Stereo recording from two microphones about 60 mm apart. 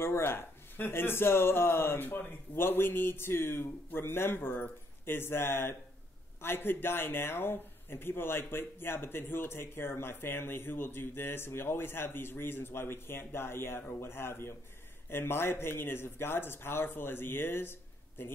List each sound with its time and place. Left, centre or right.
0.0 s speech: left